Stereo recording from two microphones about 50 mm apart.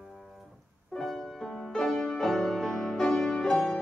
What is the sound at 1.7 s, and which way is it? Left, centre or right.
Music, centre.